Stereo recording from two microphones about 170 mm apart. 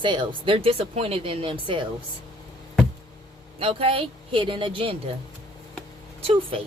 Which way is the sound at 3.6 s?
30° right (ahead or behind).